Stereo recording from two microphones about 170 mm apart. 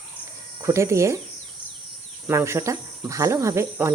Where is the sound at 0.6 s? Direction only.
15° right (ahead or behind).